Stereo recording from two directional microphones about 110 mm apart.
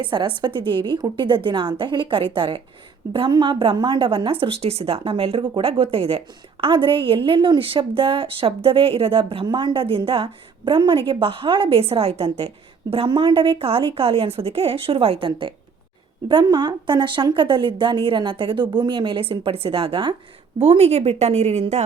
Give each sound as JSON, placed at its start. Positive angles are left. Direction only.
{"t": 0.0, "sound": "a woman's voice", "side_deg": -45}
{"t": 20.6, "sound": "speech", "side_deg": -70}